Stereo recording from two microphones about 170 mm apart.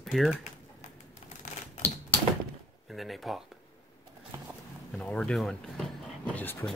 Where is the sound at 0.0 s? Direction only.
Centre (ahead or behind).